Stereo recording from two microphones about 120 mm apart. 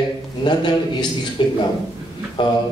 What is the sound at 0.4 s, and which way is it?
A man's voice, 40° left (ahead or behind).